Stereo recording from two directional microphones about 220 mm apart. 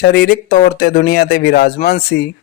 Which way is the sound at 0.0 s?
45° left (ahead or behind).